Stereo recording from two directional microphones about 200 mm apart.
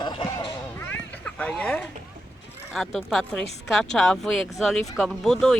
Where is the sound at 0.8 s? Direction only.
5° left (ahead or behind).